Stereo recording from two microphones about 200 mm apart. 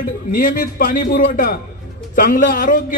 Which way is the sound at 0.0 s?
45° left (ahead or behind).